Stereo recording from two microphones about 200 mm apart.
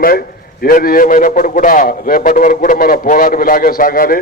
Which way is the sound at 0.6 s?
45° left (ahead or behind).